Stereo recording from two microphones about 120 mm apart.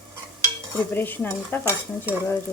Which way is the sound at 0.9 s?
15° left (ahead or behind).